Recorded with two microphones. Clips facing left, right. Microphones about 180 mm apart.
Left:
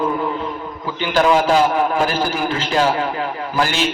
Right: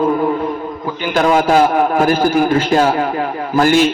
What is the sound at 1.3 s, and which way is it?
A man's voice, 45° right (ahead or behind).